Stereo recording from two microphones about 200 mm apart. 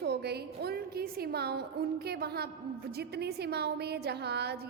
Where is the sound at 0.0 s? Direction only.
55° right (ahead or behind).